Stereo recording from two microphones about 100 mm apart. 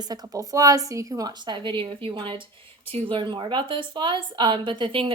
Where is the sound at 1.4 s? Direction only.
50° right (ahead or behind).